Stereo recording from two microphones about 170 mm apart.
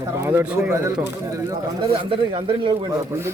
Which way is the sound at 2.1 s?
30° right (ahead or behind).